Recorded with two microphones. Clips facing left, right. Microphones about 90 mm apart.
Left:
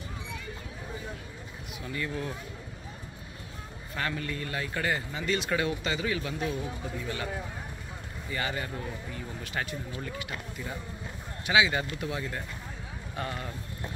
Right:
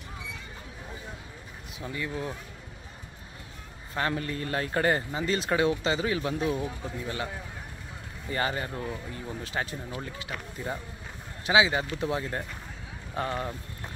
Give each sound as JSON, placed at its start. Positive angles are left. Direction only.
{"t": 1.8, "sound": "speech", "side_deg": -20}
{"t": 3.9, "sound": "speech", "side_deg": -30}
{"t": 8.3, "sound": "speech", "side_deg": -35}